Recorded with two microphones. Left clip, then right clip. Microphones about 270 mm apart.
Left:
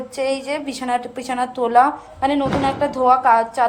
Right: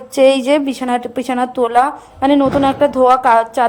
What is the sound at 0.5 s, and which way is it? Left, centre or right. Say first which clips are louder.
A woman's voice: right 7 dB; right.